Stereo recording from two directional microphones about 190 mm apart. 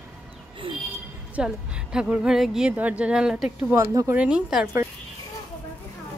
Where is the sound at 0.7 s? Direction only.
25° right (ahead or behind).